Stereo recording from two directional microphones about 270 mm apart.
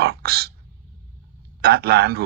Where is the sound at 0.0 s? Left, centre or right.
Right.